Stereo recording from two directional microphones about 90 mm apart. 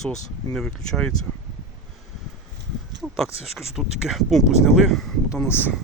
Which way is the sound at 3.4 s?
5° right (ahead or behind).